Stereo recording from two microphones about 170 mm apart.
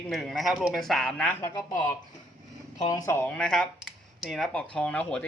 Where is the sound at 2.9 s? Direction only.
20° left (ahead or behind).